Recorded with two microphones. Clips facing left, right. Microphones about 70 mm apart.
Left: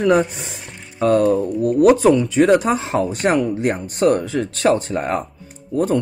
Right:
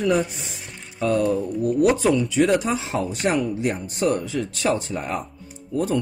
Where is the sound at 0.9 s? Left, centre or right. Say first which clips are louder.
Left 6 dB; left.